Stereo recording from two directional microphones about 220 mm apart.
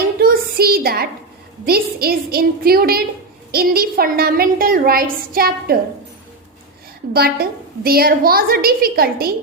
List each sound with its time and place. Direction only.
0.2 s a sound: 40° right (ahead or behind)
1.6 s a woman's voice: 45° right (ahead or behind)
7.1 s a woman's voice: 45° right (ahead or behind)